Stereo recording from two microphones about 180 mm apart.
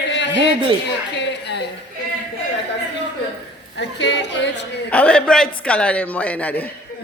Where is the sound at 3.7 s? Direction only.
75° left (ahead or behind).